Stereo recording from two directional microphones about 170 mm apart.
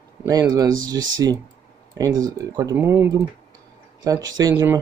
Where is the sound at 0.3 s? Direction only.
20° right (ahead or behind).